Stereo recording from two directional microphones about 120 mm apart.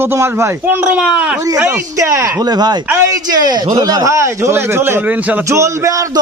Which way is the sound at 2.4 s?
35° right (ahead or behind).